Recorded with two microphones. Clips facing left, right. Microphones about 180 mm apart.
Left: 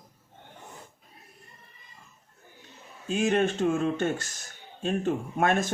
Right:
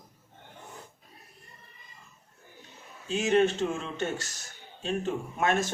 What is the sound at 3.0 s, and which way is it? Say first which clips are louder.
Speech: right 1 dB; 55° left (ahead or behind).